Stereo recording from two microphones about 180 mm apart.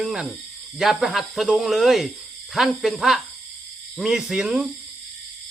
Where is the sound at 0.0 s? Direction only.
Centre (ahead or behind).